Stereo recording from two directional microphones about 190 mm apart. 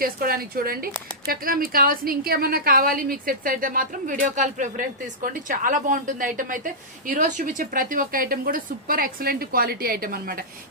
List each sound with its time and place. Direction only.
0.0 s speech: 50° right (ahead or behind)